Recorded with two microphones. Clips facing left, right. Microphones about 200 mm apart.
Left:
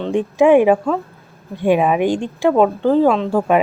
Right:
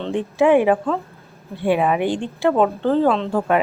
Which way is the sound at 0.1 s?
15° left (ahead or behind).